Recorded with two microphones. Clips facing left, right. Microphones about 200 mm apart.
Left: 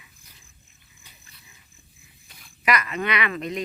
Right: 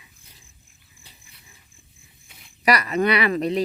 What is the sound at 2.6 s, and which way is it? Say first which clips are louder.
Speech: right 5 dB; 35° right (ahead or behind).